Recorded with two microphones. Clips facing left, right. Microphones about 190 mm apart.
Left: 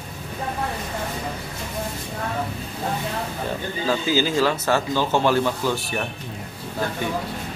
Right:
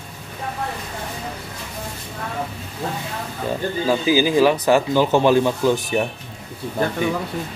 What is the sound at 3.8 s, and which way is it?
Speech, 15° right (ahead or behind).